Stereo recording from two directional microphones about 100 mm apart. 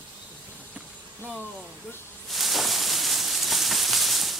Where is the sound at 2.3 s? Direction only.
Centre (ahead or behind).